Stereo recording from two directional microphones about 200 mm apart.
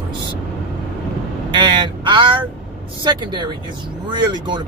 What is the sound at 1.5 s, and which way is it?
Vehicle, 20° right (ahead or behind).